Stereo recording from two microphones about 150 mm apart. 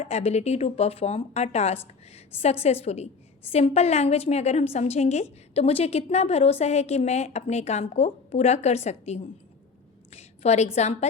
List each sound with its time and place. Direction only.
0.0 s a woman's voice: 45° left (ahead or behind)